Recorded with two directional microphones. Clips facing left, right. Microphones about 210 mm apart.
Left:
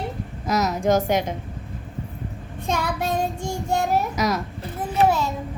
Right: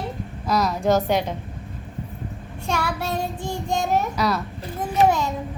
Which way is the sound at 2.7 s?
15° left (ahead or behind).